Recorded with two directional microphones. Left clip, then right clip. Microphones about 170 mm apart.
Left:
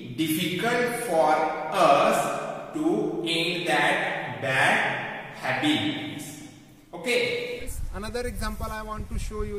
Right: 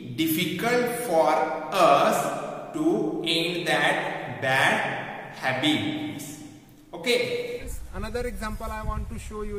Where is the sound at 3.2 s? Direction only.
5° left (ahead or behind).